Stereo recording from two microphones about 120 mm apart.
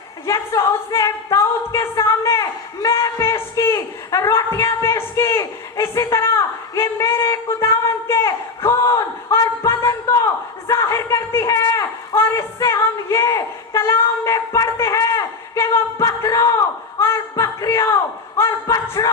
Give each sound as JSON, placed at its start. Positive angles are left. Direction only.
{"t": 0.3, "sound": "a man's voice", "side_deg": 25}